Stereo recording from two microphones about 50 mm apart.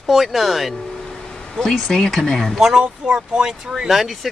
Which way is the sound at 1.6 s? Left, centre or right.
Centre.